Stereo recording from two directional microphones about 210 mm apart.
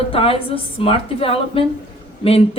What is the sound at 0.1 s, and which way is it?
A woman's voice, 25° left (ahead or behind).